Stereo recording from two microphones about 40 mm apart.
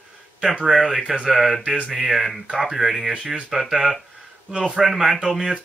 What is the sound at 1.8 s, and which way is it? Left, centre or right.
Speech, centre.